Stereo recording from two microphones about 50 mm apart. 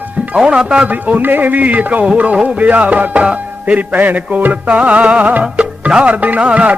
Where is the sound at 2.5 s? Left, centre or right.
Right.